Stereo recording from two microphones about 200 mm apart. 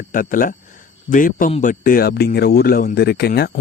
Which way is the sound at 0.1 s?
45° left (ahead or behind).